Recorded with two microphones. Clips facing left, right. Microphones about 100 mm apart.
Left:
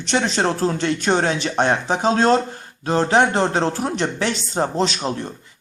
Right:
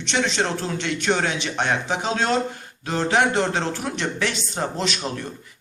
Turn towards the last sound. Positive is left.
turn(degrees=30)  # may be behind; listen again after turning